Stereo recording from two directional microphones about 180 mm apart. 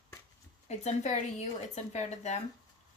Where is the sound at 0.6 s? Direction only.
40° left (ahead or behind).